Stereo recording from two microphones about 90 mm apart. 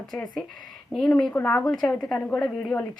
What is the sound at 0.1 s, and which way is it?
Speech, 5° left (ahead or behind).